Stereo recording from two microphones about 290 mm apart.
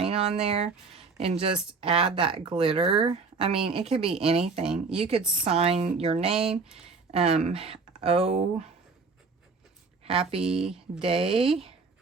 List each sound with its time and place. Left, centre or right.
0.0 s speech: right
4.6 s speech: centre
4.9 s speech: centre
5.2 s speech: centre
5.5 s speech: right
10.0 s speech: centre
10.6 s speech: centre
11.0 s speech: centre